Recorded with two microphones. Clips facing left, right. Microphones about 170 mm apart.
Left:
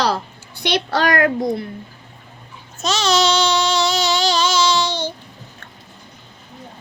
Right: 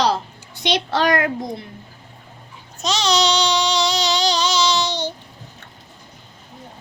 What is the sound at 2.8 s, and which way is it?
Babbling, 15° right (ahead or behind).